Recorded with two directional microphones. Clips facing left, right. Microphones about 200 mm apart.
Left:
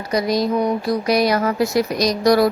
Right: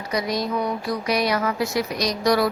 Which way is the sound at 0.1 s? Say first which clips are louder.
Left 6 dB; 40° left (ahead or behind).